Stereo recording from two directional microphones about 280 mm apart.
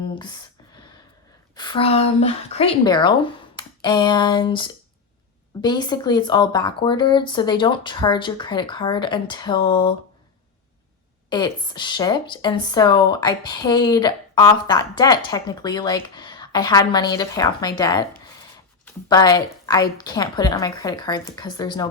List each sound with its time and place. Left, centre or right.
0.1 s a sound: centre
1.5 s speech: centre
11.3 s speech: centre